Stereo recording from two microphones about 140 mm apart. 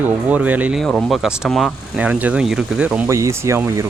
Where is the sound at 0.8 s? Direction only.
Centre (ahead or behind).